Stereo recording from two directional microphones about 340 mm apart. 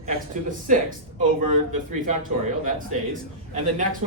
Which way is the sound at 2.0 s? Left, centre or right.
Right.